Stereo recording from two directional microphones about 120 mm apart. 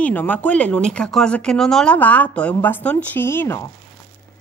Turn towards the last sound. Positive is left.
turn(degrees=20)  # may be behind; listen again after turning